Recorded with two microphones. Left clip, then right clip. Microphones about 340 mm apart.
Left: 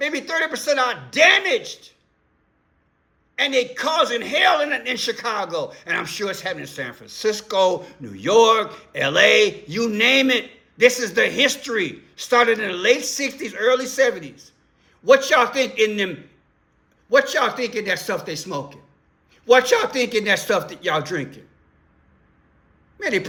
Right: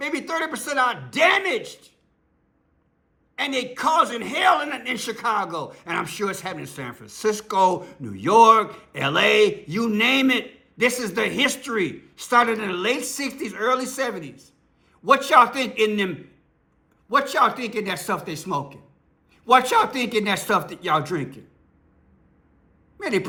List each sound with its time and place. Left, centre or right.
0.0 s a man's voice: centre
3.3 s a man's voice: centre
17.1 s a man's voice: centre
23.0 s a sound: centre